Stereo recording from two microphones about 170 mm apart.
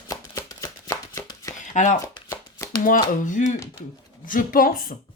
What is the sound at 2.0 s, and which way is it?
Shuffling cards, 20° left (ahead or behind).